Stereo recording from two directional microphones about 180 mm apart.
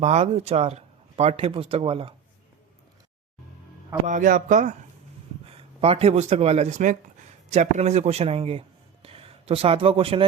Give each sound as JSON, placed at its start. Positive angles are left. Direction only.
{"t": 0.0, "sound": "speech", "side_deg": -40}
{"t": 4.0, "sound": "speech", "side_deg": -45}
{"t": 5.5, "sound": "a man's voice", "side_deg": -35}